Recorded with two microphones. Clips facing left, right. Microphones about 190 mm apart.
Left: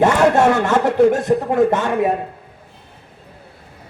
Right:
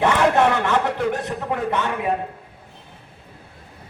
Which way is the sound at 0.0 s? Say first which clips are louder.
Left 4 dB; 45° left (ahead or behind).